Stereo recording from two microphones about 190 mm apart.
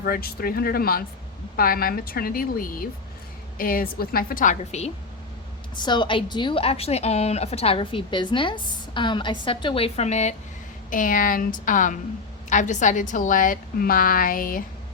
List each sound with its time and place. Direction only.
0.0 s a woman's voice: 50° left (ahead or behind)
5.7 s a woman's voice: 25° left (ahead or behind); by 14.6 s 45° left (ahead or behind)